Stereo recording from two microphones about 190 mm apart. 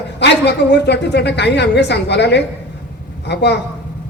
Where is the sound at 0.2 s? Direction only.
65° left (ahead or behind).